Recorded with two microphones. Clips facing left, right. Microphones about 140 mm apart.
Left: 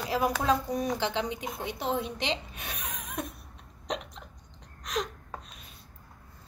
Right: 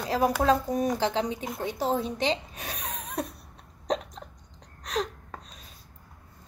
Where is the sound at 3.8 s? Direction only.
40° right (ahead or behind).